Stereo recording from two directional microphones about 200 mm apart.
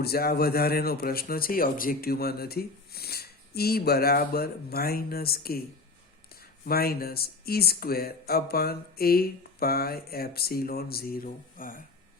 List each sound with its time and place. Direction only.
0.0 s speech: 50° left (ahead or behind)
6.7 s speech: 50° left (ahead or behind)